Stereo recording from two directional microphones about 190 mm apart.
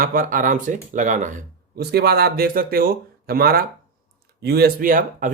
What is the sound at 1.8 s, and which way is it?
Speech, 55° right (ahead or behind).